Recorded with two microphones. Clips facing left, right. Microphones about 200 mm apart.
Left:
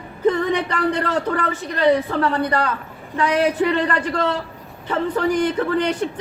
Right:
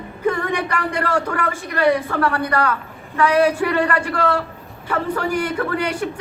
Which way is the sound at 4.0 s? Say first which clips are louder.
Even; 10° right (ahead or behind).